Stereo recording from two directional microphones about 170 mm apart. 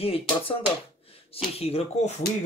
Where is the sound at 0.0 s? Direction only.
35° left (ahead or behind).